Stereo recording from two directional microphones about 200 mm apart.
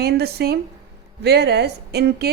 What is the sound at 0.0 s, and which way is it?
A woman's voice, 50° right (ahead or behind).